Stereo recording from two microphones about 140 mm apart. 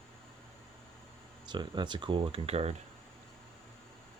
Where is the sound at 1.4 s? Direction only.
35° right (ahead or behind).